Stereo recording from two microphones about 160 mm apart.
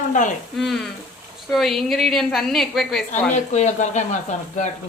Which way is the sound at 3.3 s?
50° left (ahead or behind).